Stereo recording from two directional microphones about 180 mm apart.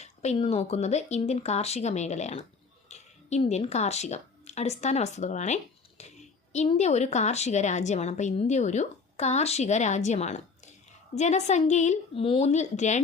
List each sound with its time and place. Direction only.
0.0 s a woman's voice: 40° left (ahead or behind)